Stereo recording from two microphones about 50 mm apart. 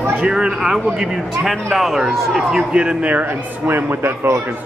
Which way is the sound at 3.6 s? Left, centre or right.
Right.